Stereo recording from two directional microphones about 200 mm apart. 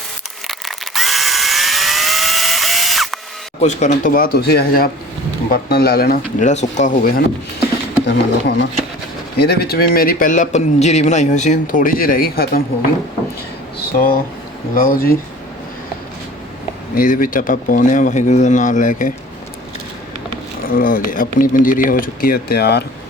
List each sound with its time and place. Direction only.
0.4 s tools: centre (ahead or behind)
3.6 s speech: 35° left (ahead or behind)
6.5 s speech: 35° left (ahead or behind)
8.0 s speech: 55° left (ahead or behind)
14.8 s speech: 45° left (ahead or behind)
16.9 s speech: 45° left (ahead or behind)
20.7 s speech: 45° left (ahead or behind)